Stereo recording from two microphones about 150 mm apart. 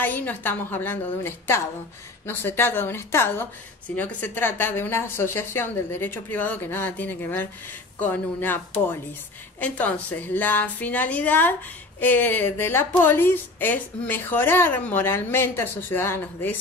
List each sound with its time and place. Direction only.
0.0 s a woman's voice: 10° left (ahead or behind)
9.6 s a woman's voice: 10° left (ahead or behind)